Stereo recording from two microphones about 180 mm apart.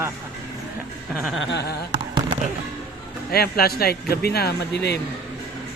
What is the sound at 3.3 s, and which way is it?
Speech, 60° left (ahead or behind).